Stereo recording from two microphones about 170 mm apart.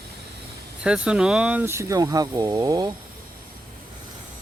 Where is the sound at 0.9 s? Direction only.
5° right (ahead or behind); by 2.9 s 25° right (ahead or behind).